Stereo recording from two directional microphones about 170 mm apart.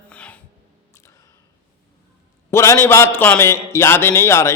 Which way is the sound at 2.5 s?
15° left (ahead or behind).